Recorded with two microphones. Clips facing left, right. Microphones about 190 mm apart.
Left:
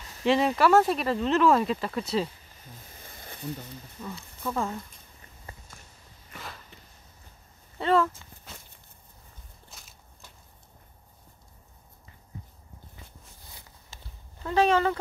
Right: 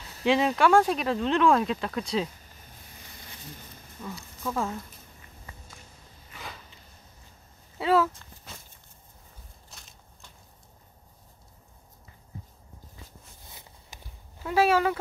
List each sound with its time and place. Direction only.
0.2 s speech: centre (ahead or behind)
3.0 s a sound: 50° left (ahead or behind)
4.0 s speech: centre (ahead or behind)
7.8 s speech: 5° right (ahead or behind)
9.7 s walk: 5° left (ahead or behind)
13.5 s walk: 20° right (ahead or behind)
14.4 s speech: 5° right (ahead or behind)